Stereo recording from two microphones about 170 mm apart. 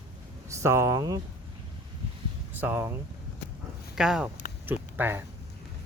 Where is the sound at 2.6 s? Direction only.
10° right (ahead or behind).